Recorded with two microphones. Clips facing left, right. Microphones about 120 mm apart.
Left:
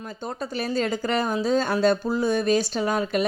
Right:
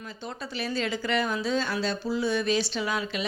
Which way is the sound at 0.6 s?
45° left (ahead or behind).